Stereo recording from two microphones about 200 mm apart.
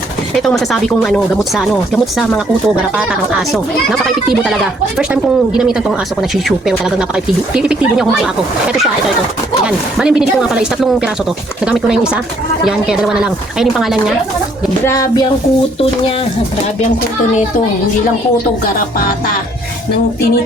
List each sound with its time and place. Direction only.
0.3 s speech: centre (ahead or behind)
4.9 s speech: 5° right (ahead or behind)
9.6 s speech: 5° right (ahead or behind)
14.8 s speech: 15° left (ahead or behind)
18.6 s music: 45° left (ahead or behind)